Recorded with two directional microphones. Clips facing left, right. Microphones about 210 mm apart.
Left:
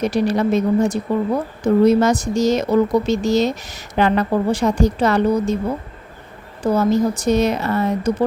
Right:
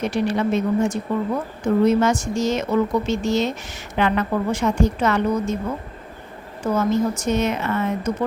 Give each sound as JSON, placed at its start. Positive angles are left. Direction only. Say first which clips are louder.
{"t": 0.0, "sound": "a woman's voice", "louder": "left 3 dB", "side_deg": 40}
{"t": 6.6, "sound": "a woman's voice", "louder": "left 3 dB", "side_deg": 35}